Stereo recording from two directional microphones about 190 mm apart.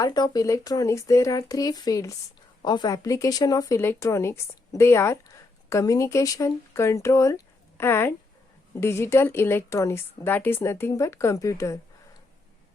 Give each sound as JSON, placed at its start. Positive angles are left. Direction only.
{"t": 0.0, "sound": "a woman's voice", "side_deg": 20}